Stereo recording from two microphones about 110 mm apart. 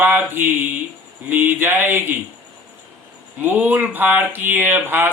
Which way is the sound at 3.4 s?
15° right (ahead or behind).